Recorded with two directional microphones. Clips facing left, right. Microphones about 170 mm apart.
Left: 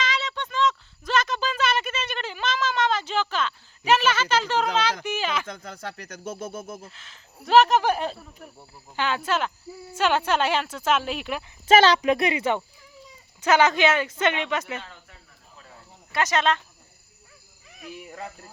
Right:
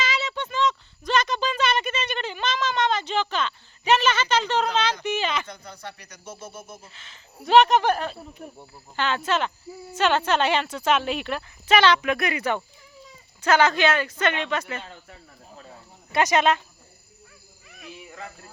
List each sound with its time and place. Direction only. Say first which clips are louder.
0.0 s a sound: right 1 dB; 5° right (ahead or behind)
5.8 s speech: left 4 dB; 50° left (ahead or behind)
6.9 s speech: right 2 dB; centre (ahead or behind)
8.2 s speech: right 5 dB; 25° right (ahead or behind)
9.0 s speech: right 1 dB; 10° left (ahead or behind)
11.7 s speech: left 2 dB; 40° left (ahead or behind); by 14.6 s 15° left (ahead or behind)
15.7 s cricket: right 4 dB; 15° right (ahead or behind)